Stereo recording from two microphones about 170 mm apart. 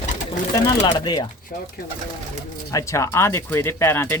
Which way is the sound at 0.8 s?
25° left (ahead or behind).